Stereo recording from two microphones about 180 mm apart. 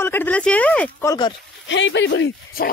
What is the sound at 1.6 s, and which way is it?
Speech, 90° left.